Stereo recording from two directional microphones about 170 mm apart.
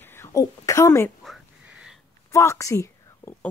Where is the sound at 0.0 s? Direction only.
15° left (ahead or behind).